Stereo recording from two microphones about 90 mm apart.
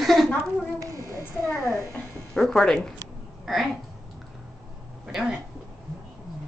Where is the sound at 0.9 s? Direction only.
40° left (ahead or behind).